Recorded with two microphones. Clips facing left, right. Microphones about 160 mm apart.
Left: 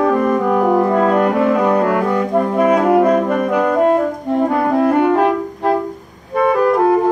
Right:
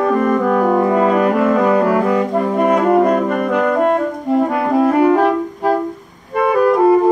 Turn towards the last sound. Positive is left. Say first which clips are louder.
# right 1 dB
turn(degrees=0)  # may be behind; listen again after turning